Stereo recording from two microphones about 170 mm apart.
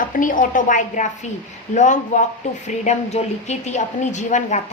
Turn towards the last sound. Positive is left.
turn(degrees=45)  # may be behind; listen again after turning